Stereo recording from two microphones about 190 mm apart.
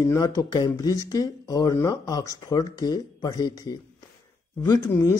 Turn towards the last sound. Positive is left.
turn(degrees=15)  # may be behind; listen again after turning